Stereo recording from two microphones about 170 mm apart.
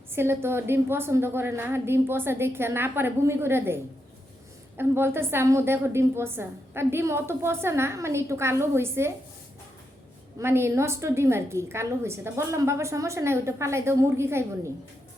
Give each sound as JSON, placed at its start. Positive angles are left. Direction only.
{"t": 0.1, "sound": "a woman's voice", "side_deg": -15}
{"t": 4.8, "sound": "a woman's voice", "side_deg": -15}
{"t": 10.3, "sound": "a woman's voice", "side_deg": -15}